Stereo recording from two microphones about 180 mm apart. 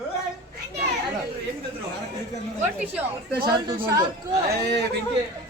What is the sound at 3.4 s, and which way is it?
Speech, 25° right (ahead or behind).